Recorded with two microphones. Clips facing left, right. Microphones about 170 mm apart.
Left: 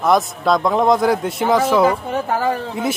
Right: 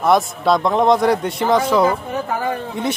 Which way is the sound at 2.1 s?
30° left (ahead or behind).